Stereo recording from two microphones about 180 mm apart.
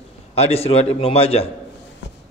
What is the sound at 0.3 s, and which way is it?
A man's voice, 35° left (ahead or behind).